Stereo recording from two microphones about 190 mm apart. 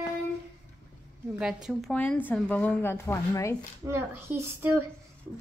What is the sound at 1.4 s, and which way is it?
A woman's voice, centre (ahead or behind).